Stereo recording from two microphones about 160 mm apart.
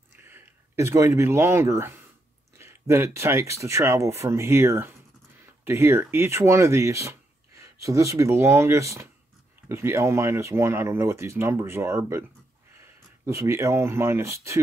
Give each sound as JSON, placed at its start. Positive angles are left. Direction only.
{"t": 0.3, "sound": "speech", "side_deg": -15}